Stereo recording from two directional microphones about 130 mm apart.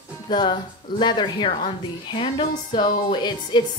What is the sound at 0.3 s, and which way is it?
Speech, 35° left (ahead or behind).